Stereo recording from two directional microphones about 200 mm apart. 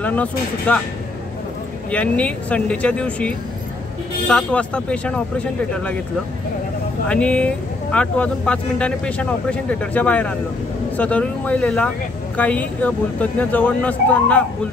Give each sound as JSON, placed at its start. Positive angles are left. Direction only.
{"t": 0.0, "sound": "speech", "side_deg": 5}
{"t": 1.9, "sound": "speech", "side_deg": 5}
{"t": 7.1, "sound": "speech", "side_deg": 5}